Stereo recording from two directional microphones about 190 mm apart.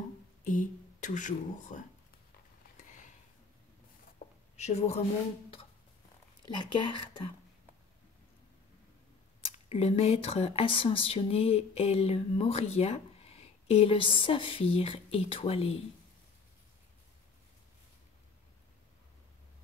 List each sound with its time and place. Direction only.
0.4 s speech: 45° left (ahead or behind)
2.8 s a sound: 40° left (ahead or behind)
4.6 s speech: 35° left (ahead or behind)
6.5 s speech: 25° left (ahead or behind)
9.5 s speech: 35° left (ahead or behind)